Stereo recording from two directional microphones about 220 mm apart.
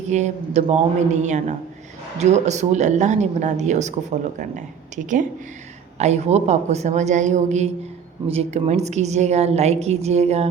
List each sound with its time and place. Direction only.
0.1 s a woman's voice: 30° right (ahead or behind)